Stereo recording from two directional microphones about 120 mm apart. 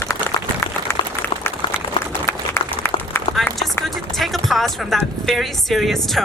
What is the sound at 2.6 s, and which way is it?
Applause, 20° left (ahead or behind).